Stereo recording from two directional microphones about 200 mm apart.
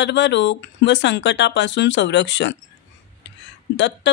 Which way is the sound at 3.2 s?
60° left (ahead or behind).